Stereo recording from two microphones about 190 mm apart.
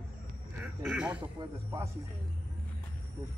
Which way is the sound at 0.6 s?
5° right (ahead or behind).